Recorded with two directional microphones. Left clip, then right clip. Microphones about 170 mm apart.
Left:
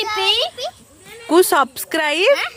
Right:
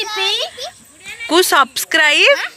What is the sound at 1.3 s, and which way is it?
A child's voice, 20° left (ahead or behind).